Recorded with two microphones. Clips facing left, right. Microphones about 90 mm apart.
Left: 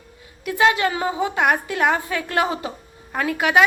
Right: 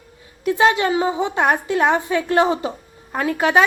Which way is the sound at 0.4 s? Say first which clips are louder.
Right 2 dB; 30° right (ahead or behind).